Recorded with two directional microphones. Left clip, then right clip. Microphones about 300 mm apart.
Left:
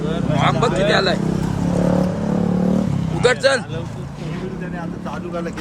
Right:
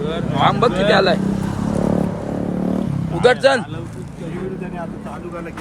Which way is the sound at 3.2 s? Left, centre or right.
Centre.